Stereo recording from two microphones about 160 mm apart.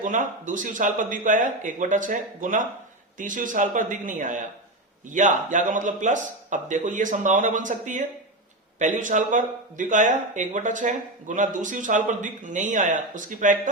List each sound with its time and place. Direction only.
0.0 s speech: 55° right (ahead or behind)